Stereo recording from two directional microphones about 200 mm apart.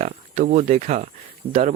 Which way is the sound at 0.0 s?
35° right (ahead or behind).